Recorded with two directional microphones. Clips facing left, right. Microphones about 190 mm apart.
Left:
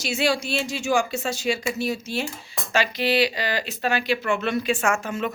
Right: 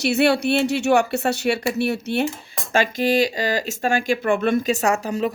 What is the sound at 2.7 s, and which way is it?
Speech, 45° right (ahead or behind).